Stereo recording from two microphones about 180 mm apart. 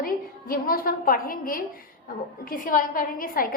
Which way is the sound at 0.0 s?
50° left (ahead or behind).